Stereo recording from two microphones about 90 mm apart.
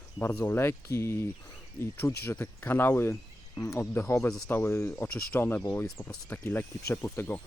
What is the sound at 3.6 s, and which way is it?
Speech, 40° left (ahead or behind).